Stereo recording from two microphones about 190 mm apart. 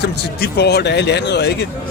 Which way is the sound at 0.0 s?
60° left (ahead or behind).